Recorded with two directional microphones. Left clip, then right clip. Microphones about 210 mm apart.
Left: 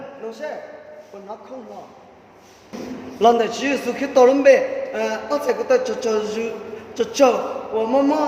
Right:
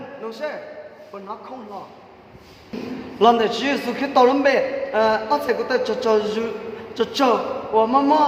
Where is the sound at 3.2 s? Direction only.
25° right (ahead or behind).